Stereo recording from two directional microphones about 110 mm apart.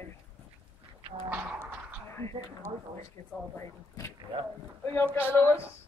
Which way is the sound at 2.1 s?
25° left (ahead or behind).